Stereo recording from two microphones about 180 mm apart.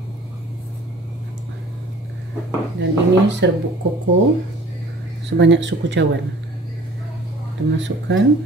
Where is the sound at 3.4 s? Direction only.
75° right (ahead or behind).